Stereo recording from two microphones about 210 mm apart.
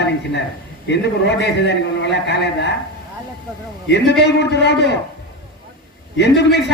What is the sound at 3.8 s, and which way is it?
A man's voice, 55° left (ahead or behind).